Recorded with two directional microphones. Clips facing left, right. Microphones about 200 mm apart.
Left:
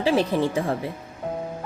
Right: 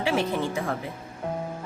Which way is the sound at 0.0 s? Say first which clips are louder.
Left 4 dB; 35° left (ahead or behind).